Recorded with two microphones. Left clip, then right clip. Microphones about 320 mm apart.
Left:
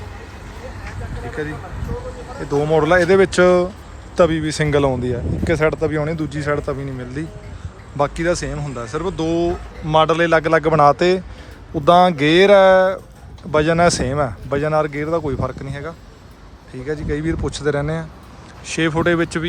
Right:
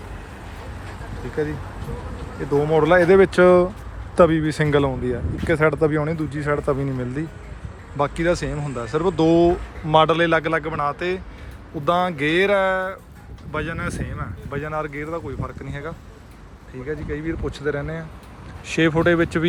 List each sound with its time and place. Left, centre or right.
1.4 s speech: centre